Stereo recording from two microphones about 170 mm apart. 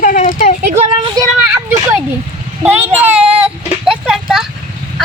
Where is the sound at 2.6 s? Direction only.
10° right (ahead or behind).